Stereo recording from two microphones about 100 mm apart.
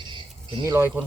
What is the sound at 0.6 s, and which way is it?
Speech, 25° right (ahead or behind).